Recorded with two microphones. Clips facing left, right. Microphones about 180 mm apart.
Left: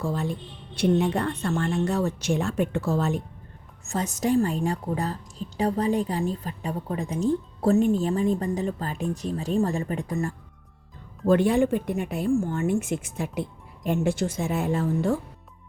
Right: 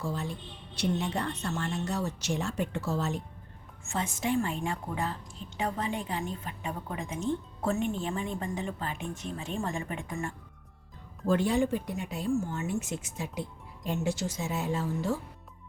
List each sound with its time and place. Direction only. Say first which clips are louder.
0.0 s speech: left 6 dB; 60° left (ahead or behind)
3.8 s a woman's voice: left 6 dB; 40° left (ahead or behind)
11.3 s speech: left 6 dB; 60° left (ahead or behind)